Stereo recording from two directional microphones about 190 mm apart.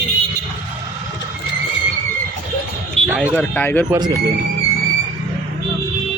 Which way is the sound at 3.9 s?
20° right (ahead or behind).